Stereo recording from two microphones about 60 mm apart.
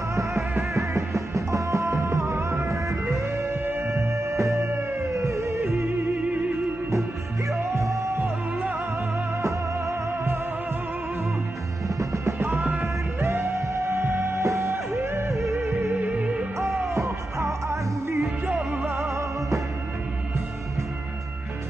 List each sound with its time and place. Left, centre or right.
0.1 s music: right
7.7 s music: right
9.4 s music: right
12.0 s music: right
15.9 s music: right
16.9 s music: right
18.2 s music: centre